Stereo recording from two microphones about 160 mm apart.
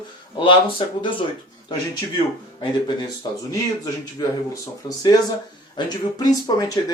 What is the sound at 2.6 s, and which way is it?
Speech, 30° left (ahead or behind).